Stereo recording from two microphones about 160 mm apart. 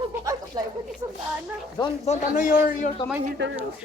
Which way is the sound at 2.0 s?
55° left (ahead or behind).